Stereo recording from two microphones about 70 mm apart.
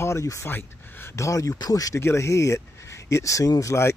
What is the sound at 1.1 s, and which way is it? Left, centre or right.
Speech, left.